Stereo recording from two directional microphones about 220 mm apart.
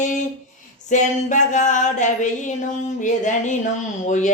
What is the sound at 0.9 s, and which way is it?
Music, 35° left (ahead or behind).